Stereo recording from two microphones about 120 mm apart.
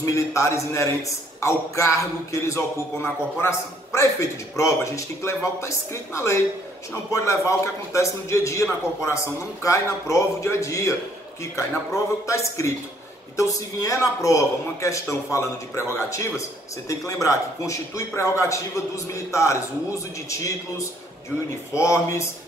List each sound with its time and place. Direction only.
0.0 s a man's voice: 25° left (ahead or behind)